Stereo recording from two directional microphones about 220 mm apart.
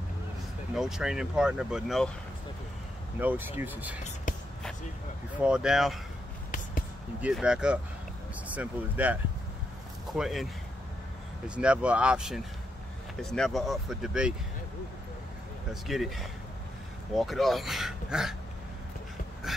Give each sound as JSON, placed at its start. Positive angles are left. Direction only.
{"t": 0.7, "sound": "speech", "side_deg": 0}
{"t": 3.2, "sound": "speech", "side_deg": -10}
{"t": 4.3, "sound": "a sound", "side_deg": 35}
{"t": 5.4, "sound": "speech", "side_deg": -5}
{"t": 7.2, "sound": "speech", "side_deg": -5}
{"t": 15.7, "sound": "speech", "side_deg": 0}